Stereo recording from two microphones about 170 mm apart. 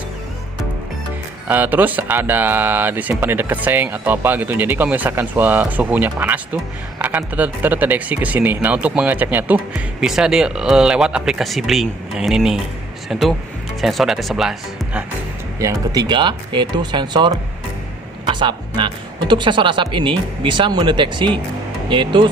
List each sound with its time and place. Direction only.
1.5 s speech: 10° right (ahead or behind)
15.5 s speech: 20° right (ahead or behind)